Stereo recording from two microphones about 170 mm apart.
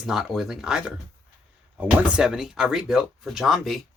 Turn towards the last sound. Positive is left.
turn(degrees=0)  # may be behind; listen again after turning